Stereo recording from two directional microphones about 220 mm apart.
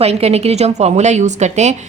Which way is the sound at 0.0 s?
30° right (ahead or behind).